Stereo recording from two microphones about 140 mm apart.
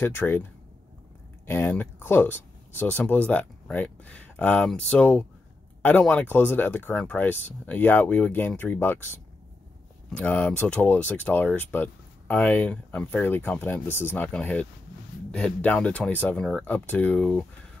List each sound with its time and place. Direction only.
0.0 s speech: 15° left (ahead or behind)
1.4 s speech: 15° left (ahead or behind)
10.1 s speech: 10° left (ahead or behind)